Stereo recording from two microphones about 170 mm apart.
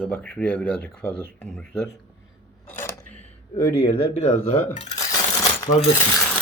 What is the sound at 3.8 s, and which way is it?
Speech, 35° left (ahead or behind).